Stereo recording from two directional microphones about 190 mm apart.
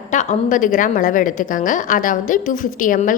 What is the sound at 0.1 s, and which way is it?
A woman's voice, 40° left (ahead or behind).